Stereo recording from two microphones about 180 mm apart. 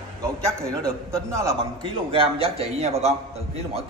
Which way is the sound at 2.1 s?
30° right (ahead or behind).